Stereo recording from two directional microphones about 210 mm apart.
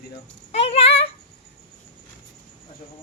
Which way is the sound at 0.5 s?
30° left (ahead or behind).